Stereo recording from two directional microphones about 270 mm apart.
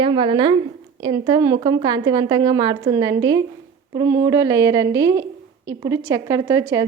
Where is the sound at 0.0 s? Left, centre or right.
Centre.